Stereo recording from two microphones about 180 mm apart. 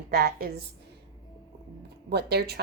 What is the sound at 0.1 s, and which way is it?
Speech, 60° right (ahead or behind).